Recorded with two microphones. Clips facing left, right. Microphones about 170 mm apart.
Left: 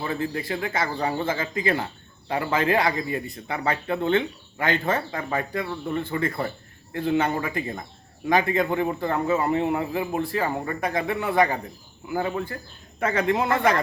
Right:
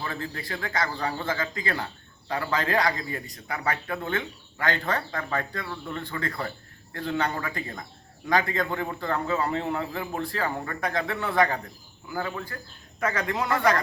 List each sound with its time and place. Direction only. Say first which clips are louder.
0.0 s a man's voice: left 6 dB; 20° left (ahead or behind)